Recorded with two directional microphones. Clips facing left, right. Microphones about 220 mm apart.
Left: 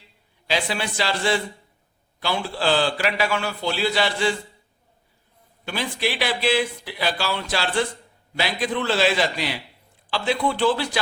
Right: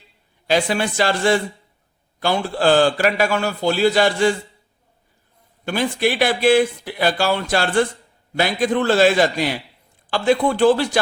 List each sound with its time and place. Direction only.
0.4 s speech: 50° right (ahead or behind)
5.6 s speech: 50° right (ahead or behind)